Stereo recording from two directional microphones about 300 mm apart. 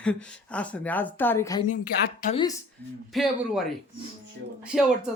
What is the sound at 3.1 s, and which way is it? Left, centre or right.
Speech, centre.